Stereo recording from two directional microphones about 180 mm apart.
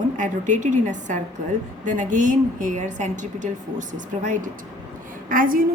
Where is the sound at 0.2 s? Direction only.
45° right (ahead or behind).